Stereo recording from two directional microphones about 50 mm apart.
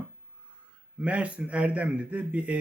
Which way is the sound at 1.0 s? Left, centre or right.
Right.